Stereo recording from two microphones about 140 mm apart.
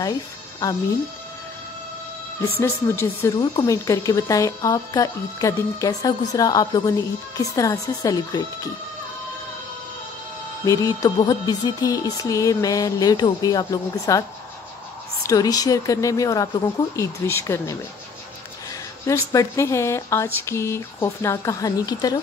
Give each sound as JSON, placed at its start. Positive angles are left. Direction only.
{"t": 2.6, "sound": "speech", "side_deg": 15}
{"t": 3.3, "sound": "music", "side_deg": 25}
{"t": 10.6, "sound": "music", "side_deg": 25}
{"t": 15.2, "sound": "music", "side_deg": 25}
{"t": 19.0, "sound": "music", "side_deg": 20}